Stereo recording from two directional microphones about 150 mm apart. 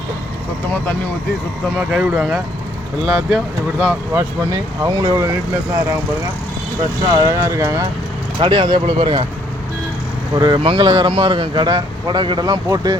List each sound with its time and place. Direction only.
1.9 s speech: 5° right (ahead or behind)
4.1 s speech: 15° right (ahead or behind)
7.2 s speech: 20° right (ahead or behind)
8.4 s speech: 30° right (ahead or behind)
10.3 s speech: 30° right (ahead or behind)